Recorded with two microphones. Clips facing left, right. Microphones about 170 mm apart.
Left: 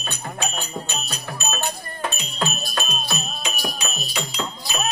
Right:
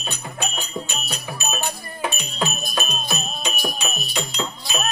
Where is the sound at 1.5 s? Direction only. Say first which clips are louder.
Even; 10° right (ahead or behind).